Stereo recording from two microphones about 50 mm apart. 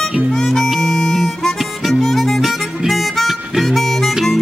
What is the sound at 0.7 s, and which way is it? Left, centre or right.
Music, centre.